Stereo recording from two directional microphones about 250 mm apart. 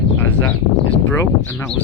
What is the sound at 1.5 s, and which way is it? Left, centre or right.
Speech, centre.